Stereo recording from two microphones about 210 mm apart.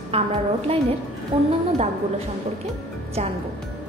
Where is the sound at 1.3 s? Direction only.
25° right (ahead or behind).